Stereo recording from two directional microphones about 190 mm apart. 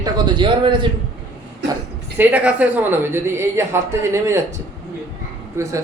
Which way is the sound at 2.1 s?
5° right (ahead or behind).